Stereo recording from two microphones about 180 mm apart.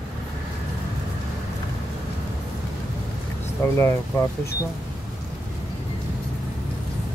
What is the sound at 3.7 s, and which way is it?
Speech, 15° left (ahead or behind).